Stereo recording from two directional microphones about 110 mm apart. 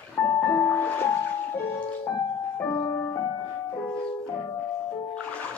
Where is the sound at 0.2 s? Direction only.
15° left (ahead or behind).